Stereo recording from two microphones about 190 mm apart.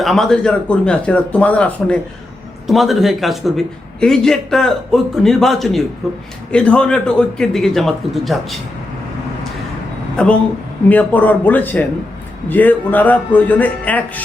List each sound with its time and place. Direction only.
0.0 s a man's voice: centre (ahead or behind)
10.2 s a man's voice: 5° left (ahead or behind)